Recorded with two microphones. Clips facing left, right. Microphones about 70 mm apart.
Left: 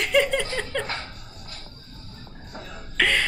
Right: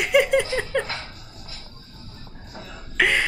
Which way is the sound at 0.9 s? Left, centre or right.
Left.